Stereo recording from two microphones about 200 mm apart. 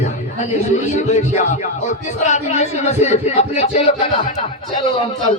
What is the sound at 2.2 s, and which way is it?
A man's voice, 35° left (ahead or behind).